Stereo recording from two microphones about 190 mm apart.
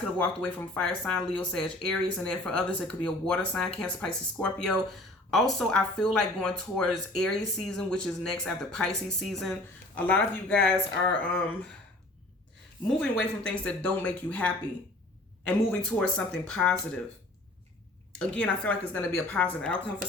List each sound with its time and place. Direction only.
0.4 s a woman's voice: 5° left (ahead or behind)
12.9 s a woman's voice: 5° left (ahead or behind)
18.1 s a woman's voice: 5° left (ahead or behind)